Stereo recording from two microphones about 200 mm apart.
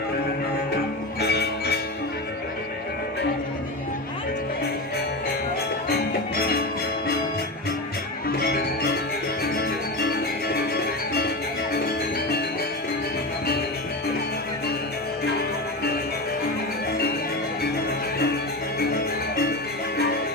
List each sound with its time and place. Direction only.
1.2 s music: 55° left (ahead or behind)
8.4 s music: 50° left (ahead or behind)
11.7 s music: 55° left (ahead or behind)